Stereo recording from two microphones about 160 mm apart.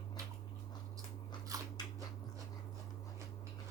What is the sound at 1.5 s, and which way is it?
Biting, 20° right (ahead or behind).